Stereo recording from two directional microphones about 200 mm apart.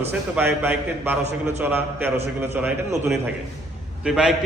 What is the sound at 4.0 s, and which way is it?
Speech, centre (ahead or behind).